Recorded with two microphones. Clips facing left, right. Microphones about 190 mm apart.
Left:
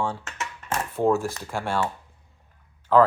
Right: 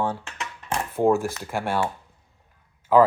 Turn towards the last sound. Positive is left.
turn(degrees=-10)  # may be behind; listen again after turning